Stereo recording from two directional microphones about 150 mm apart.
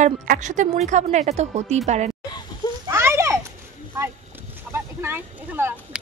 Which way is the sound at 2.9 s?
15° right (ahead or behind).